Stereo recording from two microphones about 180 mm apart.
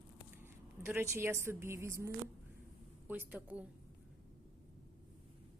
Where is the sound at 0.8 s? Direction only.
15° right (ahead or behind).